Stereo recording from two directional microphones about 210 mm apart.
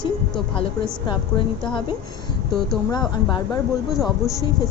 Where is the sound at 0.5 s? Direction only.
25° left (ahead or behind).